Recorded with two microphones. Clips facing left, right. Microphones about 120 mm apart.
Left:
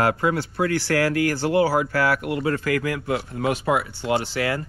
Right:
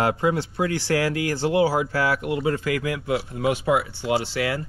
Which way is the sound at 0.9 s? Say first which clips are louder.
Left 2 dB; 50° left (ahead or behind).